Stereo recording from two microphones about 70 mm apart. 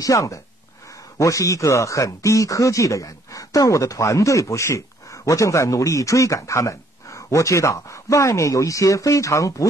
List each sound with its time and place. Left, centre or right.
0.0 s speech: left